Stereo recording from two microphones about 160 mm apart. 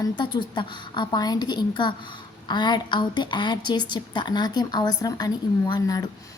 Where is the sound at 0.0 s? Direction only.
30° left (ahead or behind).